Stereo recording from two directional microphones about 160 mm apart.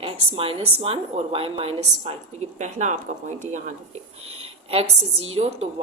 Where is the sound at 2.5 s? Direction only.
50° right (ahead or behind).